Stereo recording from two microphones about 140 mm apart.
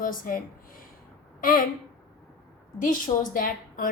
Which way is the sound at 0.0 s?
75° left (ahead or behind).